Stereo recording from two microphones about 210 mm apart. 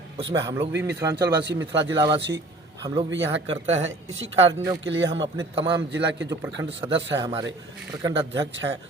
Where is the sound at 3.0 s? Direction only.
60° right (ahead or behind).